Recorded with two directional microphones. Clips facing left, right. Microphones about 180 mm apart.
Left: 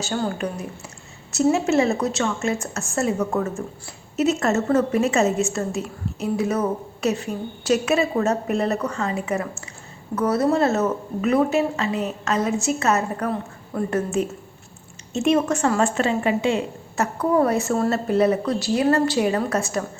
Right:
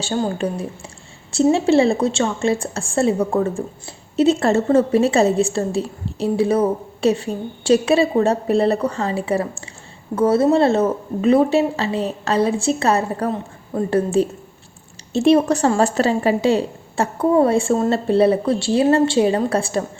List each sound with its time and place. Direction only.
0.0 s a woman's voice: 25° right (ahead or behind)